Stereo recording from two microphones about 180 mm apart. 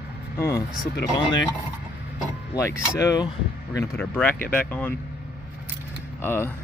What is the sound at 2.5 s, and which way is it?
Speech, 15° left (ahead or behind).